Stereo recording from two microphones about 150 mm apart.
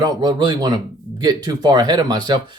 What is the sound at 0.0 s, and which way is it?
Speech, 30° right (ahead or behind).